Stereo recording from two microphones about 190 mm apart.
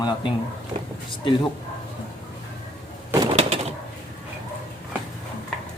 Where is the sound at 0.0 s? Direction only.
20° left (ahead or behind).